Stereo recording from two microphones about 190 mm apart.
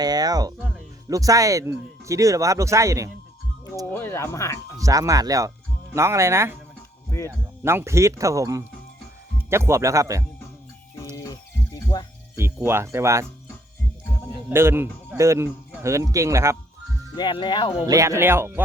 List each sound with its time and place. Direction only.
0.0 s speech: 20° right (ahead or behind)
3.9 s speech: 10° left (ahead or behind)
4.8 s speech: 15° right (ahead or behind)
11.2 s music: 20° left (ahead or behind)
12.6 s speech: 15° right (ahead or behind)
14.5 s speech: 10° right (ahead or behind)
17.2 s speech: 25° left (ahead or behind)
17.8 s speech: 15° right (ahead or behind)